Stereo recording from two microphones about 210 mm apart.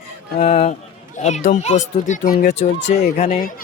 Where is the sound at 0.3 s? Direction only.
30° left (ahead or behind).